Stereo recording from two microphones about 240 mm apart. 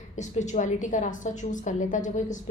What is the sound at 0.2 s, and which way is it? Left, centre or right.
A woman's voice, left.